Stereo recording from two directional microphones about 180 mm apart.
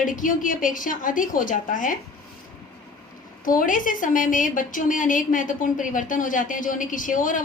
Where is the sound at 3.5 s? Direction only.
50° left (ahead or behind).